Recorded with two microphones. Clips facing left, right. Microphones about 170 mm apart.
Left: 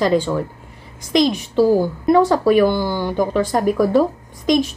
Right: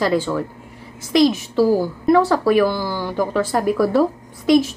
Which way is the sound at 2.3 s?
Centre (ahead or behind).